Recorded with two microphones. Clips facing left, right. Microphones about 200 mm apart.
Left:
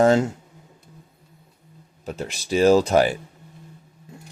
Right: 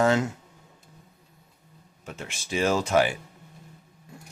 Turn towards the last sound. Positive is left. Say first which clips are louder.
# left 7 dB
turn(degrees=35)  # may be behind; listen again after turning